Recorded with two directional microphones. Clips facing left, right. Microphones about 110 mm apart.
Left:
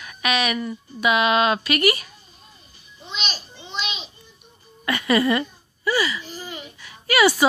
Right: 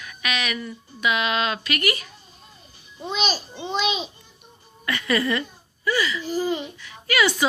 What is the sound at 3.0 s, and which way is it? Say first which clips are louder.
Child singing: right 7 dB; 40° right (ahead or behind).